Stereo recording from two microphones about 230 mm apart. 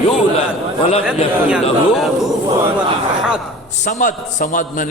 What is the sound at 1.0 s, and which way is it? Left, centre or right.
Speech, centre.